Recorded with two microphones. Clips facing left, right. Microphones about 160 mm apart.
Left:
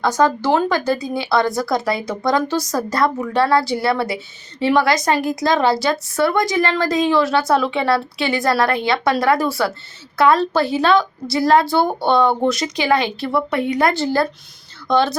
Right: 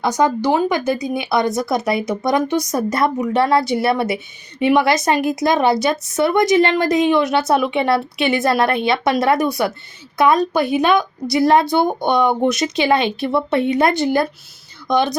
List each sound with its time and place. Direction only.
0.0 s a woman's voice: 20° right (ahead or behind)